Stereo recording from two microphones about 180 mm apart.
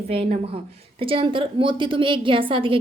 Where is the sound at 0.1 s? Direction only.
30° right (ahead or behind).